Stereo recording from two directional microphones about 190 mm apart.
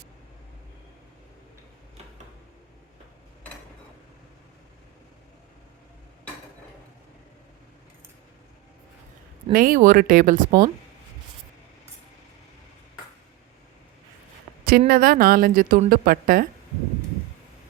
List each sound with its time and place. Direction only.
9.5 s speech: 45° right (ahead or behind)
14.6 s speech: 50° right (ahead or behind)